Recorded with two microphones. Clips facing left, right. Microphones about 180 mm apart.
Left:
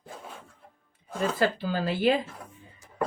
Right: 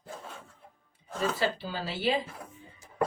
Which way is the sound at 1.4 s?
50° left (ahead or behind).